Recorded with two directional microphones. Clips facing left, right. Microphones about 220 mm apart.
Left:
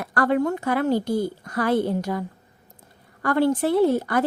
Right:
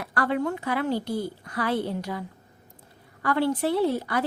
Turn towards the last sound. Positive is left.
turn(degrees=50)  # may be behind; listen again after turning